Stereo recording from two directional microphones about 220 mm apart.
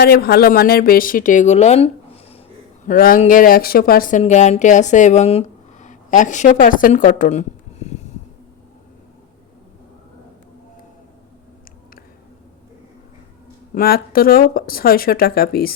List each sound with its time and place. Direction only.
0.0 s speech: 45° left (ahead or behind)
13.7 s speech: 45° left (ahead or behind)